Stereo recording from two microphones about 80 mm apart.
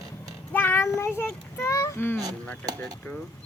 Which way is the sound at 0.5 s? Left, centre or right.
Left.